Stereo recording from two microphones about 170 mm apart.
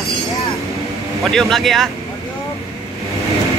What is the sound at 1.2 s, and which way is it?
Speech, centre (ahead or behind).